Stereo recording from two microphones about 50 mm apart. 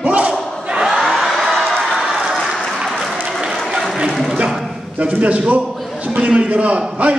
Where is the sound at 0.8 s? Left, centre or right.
Centre.